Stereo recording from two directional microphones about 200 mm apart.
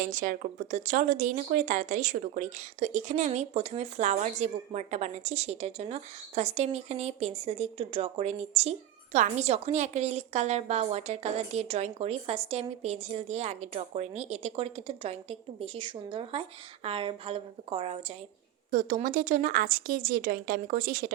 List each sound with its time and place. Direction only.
0.0 s a woman's voice: 40° right (ahead or behind)
18.7 s speech: 40° right (ahead or behind)